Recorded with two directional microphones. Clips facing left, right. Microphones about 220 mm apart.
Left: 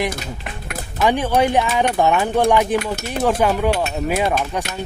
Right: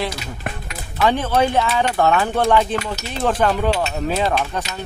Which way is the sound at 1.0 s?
15° left (ahead or behind).